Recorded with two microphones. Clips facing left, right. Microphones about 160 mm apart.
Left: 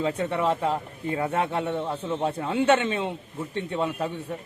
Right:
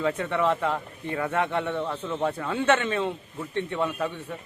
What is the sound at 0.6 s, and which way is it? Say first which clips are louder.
Speech: left 1 dB; 30° left (ahead or behind).